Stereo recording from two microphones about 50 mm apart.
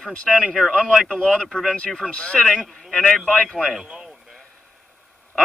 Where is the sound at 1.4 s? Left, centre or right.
Centre.